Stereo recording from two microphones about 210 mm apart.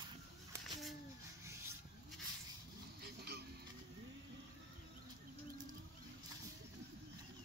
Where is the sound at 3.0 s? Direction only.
50° right (ahead or behind).